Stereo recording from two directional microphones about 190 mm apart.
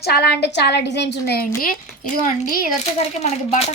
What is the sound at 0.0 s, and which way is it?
A woman's voice, 55° left (ahead or behind).